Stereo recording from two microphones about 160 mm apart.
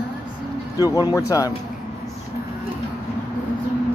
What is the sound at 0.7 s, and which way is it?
Speech, 25° left (ahead or behind).